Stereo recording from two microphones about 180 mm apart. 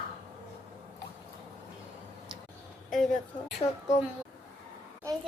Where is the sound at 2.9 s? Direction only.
Centre (ahead or behind).